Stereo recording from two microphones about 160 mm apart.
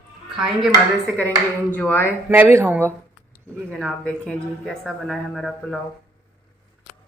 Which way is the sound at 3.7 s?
5° left (ahead or behind).